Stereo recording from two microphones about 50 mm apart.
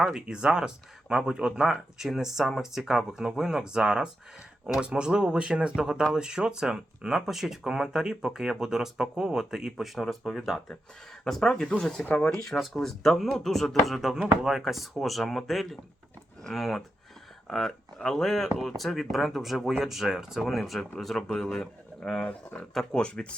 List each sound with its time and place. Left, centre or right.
0.1 s speech: centre